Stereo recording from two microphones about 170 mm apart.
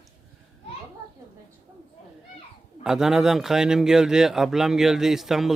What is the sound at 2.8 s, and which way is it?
Speech, 5° right (ahead or behind).